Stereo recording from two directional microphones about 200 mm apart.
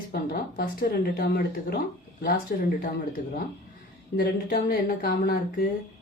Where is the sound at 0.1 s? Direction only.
45° left (ahead or behind).